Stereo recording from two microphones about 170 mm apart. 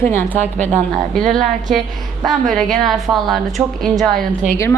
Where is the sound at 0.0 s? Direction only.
15° left (ahead or behind).